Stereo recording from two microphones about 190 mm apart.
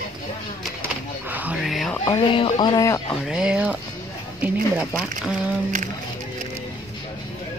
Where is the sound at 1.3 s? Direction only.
10° right (ahead or behind).